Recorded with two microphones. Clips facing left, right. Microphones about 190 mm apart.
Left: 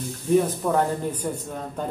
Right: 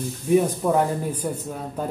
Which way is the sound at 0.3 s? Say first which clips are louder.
Right 1 dB; 10° right (ahead or behind).